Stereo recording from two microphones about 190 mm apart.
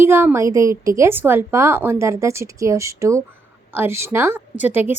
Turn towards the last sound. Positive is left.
turn(degrees=-10)  # may be behind; listen again after turning